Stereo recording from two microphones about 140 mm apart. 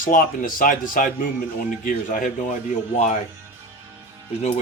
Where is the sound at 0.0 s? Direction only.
75° left (ahead or behind).